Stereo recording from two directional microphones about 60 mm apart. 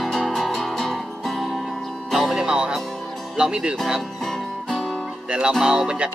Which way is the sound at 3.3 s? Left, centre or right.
Centre.